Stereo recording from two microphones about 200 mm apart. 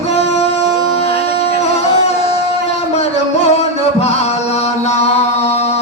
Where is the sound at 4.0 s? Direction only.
35° left (ahead or behind).